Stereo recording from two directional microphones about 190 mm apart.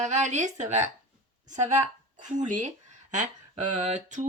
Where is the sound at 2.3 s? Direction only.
40° right (ahead or behind).